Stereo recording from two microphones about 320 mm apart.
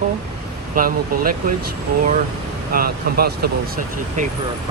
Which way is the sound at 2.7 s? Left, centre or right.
Right.